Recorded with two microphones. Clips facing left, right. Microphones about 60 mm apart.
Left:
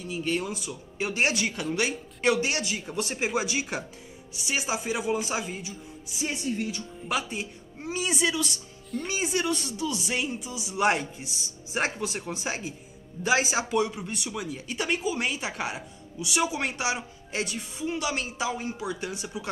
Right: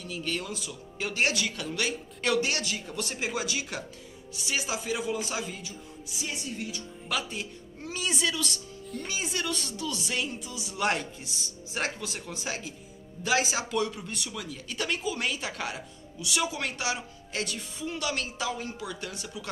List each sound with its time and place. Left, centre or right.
0.0 s speech: centre
6.2 s a woman's voice: left
6.8 s speech: centre